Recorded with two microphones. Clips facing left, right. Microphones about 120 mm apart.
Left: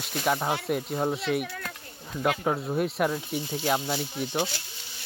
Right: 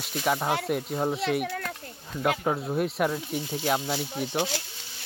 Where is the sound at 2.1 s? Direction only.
Centre (ahead or behind).